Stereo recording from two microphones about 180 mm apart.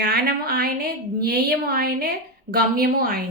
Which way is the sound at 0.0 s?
60° right (ahead or behind).